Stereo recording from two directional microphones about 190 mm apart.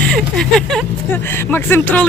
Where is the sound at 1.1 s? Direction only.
10° left (ahead or behind).